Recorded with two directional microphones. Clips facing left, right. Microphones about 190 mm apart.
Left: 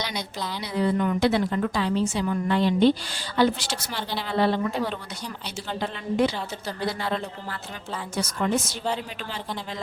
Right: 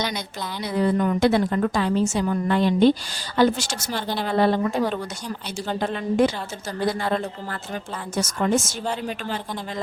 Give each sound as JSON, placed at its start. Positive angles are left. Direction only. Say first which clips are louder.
{"t": 0.6, "sound": "a woman's voice", "louder": "right 3 dB", "side_deg": -45}